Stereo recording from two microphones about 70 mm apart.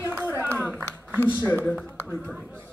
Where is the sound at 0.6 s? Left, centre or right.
Right.